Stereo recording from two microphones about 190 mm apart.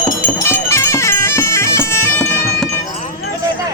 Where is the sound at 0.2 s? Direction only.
15° left (ahead or behind).